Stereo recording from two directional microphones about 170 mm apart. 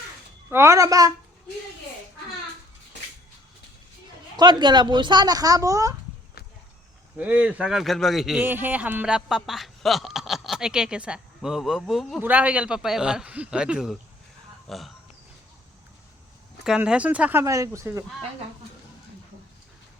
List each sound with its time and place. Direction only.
0.5 s speech: 15° right (ahead or behind)
4.4 s speech: 25° right (ahead or behind)
7.2 s speech: 10° right (ahead or behind)
16.6 s speech: 5° right (ahead or behind)